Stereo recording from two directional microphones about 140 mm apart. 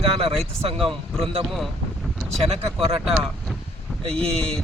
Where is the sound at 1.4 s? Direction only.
Centre (ahead or behind).